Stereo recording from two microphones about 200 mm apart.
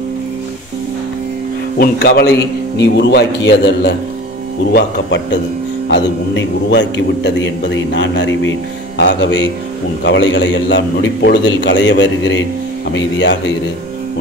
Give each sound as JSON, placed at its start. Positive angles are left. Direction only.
{"t": 1.8, "sound": "a man's voice", "side_deg": 50}